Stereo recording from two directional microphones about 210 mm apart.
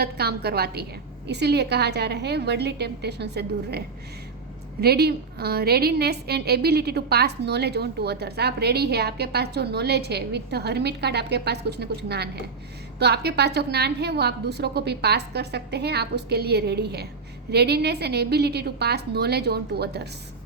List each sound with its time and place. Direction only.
0.0 s a woman's voice: 50° right (ahead or behind)